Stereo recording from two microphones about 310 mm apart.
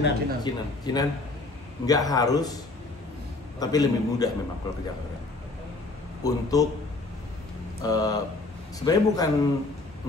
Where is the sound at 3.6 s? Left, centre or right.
Centre.